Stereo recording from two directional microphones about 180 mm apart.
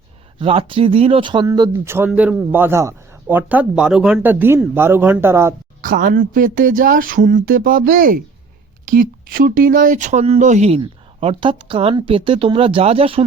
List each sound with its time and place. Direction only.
0.3 s a man's voice: 30° right (ahead or behind)
5.8 s speech: 50° right (ahead or behind); by 13.2 s 30° right (ahead or behind)